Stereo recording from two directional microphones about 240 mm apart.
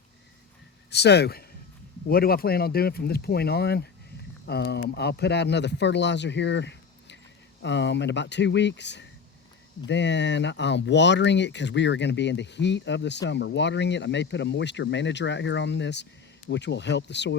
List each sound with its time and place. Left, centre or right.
0.9 s speech: left